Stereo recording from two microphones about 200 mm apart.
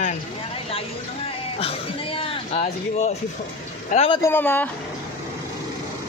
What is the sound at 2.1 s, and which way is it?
A man's voice, 30° left (ahead or behind).